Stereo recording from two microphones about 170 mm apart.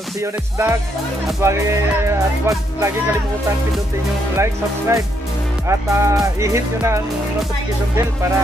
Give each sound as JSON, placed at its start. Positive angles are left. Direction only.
{"t": 0.2, "sound": "speech", "side_deg": -15}
{"t": 4.4, "sound": "speech", "side_deg": -15}